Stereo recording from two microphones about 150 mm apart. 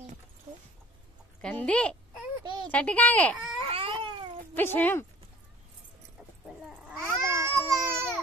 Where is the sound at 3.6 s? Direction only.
35° right (ahead or behind).